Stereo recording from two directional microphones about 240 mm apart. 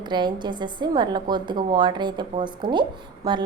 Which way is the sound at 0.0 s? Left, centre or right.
Centre.